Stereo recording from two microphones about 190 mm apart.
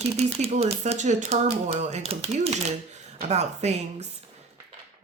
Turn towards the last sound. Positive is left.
turn(degrees=-35)  # may be behind; listen again after turning